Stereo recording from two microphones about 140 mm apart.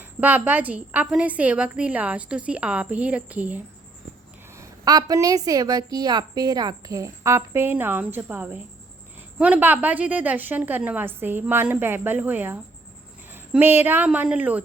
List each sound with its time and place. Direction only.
0.0 s a woman's voice: 10° right (ahead or behind)
4.5 s a woman's voice: 25° right (ahead or behind)